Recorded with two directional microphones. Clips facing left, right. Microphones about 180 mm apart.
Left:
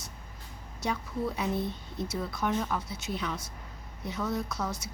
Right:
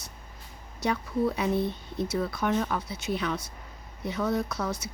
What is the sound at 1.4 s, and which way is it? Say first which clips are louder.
A woman's voice: right 4 dB; 65° right (ahead or behind).